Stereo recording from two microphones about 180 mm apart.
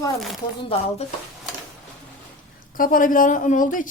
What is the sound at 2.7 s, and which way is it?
Speech, 50° left (ahead or behind).